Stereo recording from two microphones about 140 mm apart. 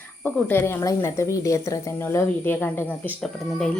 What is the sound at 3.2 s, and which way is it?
Speech, centre (ahead or behind).